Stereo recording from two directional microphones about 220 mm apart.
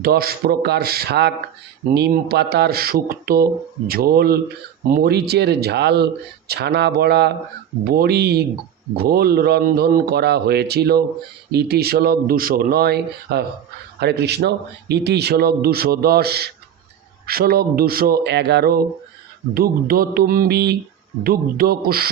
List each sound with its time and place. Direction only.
0.0 s speech: 45° right (ahead or behind)